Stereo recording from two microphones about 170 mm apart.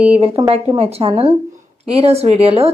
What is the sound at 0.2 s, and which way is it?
A woman's voice, 35° right (ahead or behind).